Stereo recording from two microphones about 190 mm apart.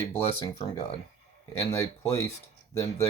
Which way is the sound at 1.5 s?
15° left (ahead or behind).